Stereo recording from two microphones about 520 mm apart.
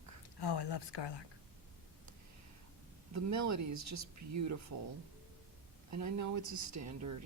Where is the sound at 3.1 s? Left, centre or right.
Right.